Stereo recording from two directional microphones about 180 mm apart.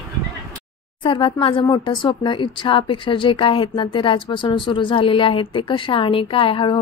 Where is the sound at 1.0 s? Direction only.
30° left (ahead or behind).